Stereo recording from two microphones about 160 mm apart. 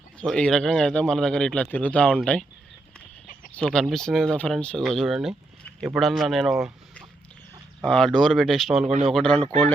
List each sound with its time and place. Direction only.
0.2 s speech: 5° left (ahead or behind)
3.5 s speech: 5° left (ahead or behind)
7.8 s speech: 5° left (ahead or behind)
8.9 s speech: 40° right (ahead or behind)
9.1 s speech: 5° left (ahead or behind)